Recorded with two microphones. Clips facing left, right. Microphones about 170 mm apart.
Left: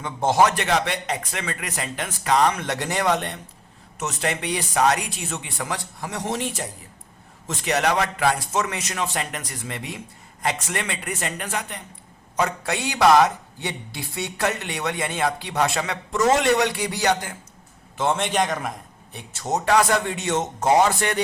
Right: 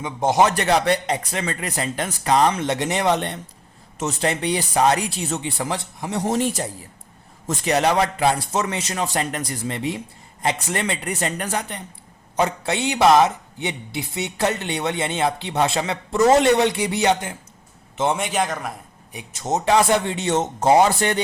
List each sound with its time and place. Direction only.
0.0 s speech: 15° right (ahead or behind)
0.4 s speech: 35° right (ahead or behind)
6.2 s speech: 40° right (ahead or behind)
7.6 s a man's voice: 35° right (ahead or behind)
18.2 s a man's voice: 5° right (ahead or behind)
19.1 s speech: 20° right (ahead or behind)